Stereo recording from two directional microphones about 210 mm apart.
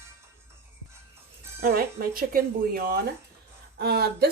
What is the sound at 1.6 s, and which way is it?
Speech, 45° right (ahead or behind).